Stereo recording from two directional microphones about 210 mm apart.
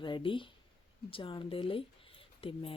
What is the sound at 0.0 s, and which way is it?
Speech, 25° left (ahead or behind).